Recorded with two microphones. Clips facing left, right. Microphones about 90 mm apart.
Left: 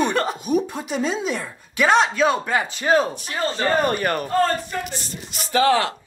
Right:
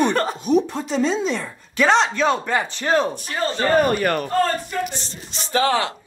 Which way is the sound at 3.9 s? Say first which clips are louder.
Right 2 dB; 30° left (ahead or behind).